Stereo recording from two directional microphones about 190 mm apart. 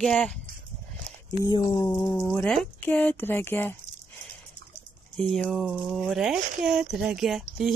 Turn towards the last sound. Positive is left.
turn(degrees=0)  # may be behind; listen again after turning